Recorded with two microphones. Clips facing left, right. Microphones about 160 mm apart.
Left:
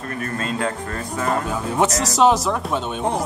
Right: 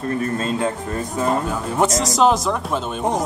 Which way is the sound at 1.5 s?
Centre (ahead or behind).